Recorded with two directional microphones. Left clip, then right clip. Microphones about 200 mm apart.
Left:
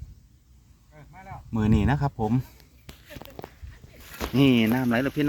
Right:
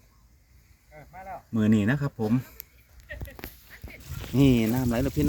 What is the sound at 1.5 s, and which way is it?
Speech, 20° left (ahead or behind).